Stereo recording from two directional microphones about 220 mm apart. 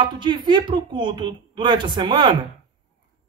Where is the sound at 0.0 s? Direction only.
20° right (ahead or behind).